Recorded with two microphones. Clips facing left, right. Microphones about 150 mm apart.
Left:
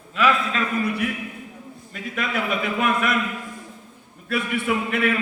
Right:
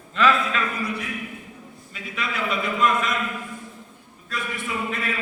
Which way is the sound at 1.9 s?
50° left (ahead or behind).